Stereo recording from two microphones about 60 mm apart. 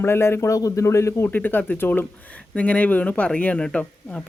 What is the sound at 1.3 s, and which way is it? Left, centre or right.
Speech, left.